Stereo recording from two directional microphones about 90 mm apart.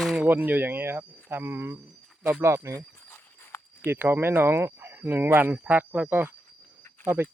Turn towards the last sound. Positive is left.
turn(degrees=-25)  # may be behind; listen again after turning